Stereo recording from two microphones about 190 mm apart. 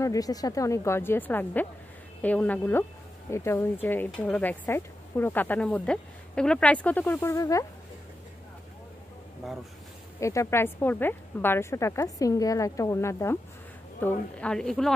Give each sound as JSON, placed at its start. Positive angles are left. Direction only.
{"t": 0.0, "sound": "speech", "side_deg": 20}
{"t": 9.4, "sound": "a woman's voice", "side_deg": 0}
{"t": 10.2, "sound": "a woman's voice", "side_deg": 15}